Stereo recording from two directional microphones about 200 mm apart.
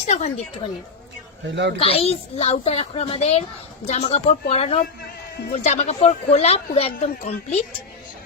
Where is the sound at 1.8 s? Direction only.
30° left (ahead or behind).